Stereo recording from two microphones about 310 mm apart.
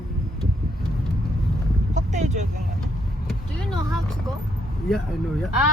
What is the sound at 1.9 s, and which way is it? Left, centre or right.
Vehicle, right.